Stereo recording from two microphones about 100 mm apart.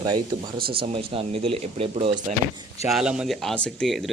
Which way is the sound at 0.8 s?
65° right (ahead or behind).